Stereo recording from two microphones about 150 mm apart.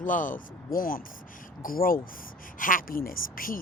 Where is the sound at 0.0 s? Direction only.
60° left (ahead or behind).